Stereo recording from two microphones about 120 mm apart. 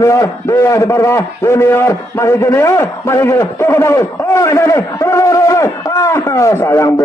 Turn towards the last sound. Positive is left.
turn(degrees=25)  # may be behind; listen again after turning